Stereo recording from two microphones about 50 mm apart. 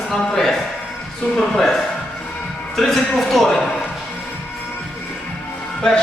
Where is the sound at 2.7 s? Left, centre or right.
Centre.